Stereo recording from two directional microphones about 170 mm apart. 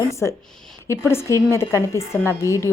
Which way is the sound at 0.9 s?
15° left (ahead or behind).